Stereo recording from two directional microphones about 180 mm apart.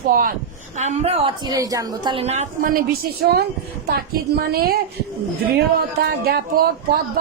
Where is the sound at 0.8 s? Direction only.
35° right (ahead or behind).